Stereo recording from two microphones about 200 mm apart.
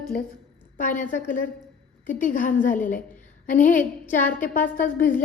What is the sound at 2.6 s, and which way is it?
A woman's voice, 40° left (ahead or behind).